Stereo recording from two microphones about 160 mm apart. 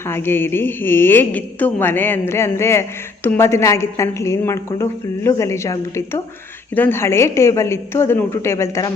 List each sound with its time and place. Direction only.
0.1 s a woman's voice: 15° left (ahead or behind)